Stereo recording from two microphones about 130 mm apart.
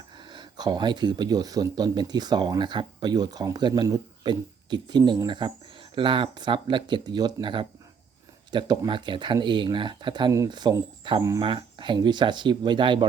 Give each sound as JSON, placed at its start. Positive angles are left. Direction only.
{"t": 0.3, "sound": "speech", "side_deg": -35}
{"t": 11.4, "sound": "speech", "side_deg": -40}